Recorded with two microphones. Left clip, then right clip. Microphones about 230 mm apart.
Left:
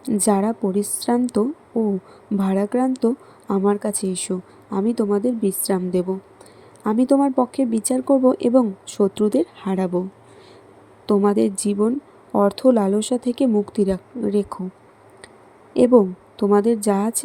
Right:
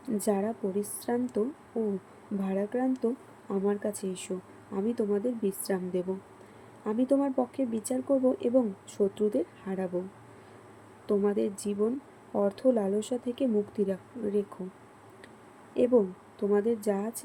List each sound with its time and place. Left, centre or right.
0.0 s speech: left
2.4 s speech: left
11.0 s speech: left
15.7 s speech: left